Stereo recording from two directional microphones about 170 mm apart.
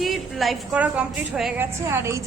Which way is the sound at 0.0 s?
Centre (ahead or behind).